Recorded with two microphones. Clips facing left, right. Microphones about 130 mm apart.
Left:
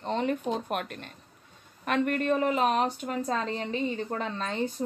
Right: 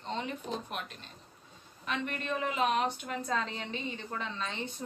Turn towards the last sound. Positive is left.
turn(degrees=45)  # may be behind; listen again after turning